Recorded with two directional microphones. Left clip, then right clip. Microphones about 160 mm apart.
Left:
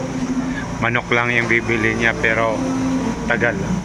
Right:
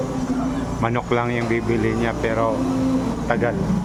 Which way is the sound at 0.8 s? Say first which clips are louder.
Left 4 dB; 15° right (ahead or behind).